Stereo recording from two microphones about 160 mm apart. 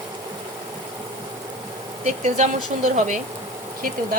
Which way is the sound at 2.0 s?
45° right (ahead or behind).